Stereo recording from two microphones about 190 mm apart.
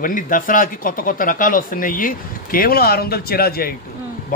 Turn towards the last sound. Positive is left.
turn(degrees=45)  # may be behind; listen again after turning